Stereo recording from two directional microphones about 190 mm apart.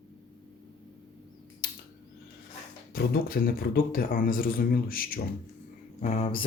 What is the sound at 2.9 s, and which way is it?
Speech, 50° left (ahead or behind).